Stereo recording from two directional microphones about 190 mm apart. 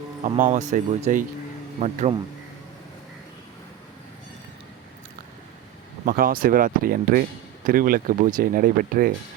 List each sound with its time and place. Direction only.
0.3 s speech: 40° right (ahead or behind)
6.1 s speech: 50° right (ahead or behind)